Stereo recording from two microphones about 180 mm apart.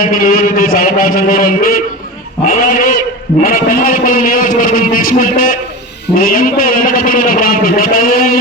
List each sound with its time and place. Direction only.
0.0 s a man's voice: 50° left (ahead or behind)